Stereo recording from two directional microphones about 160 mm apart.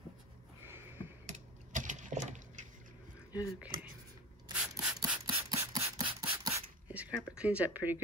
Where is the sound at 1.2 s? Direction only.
50° right (ahead or behind).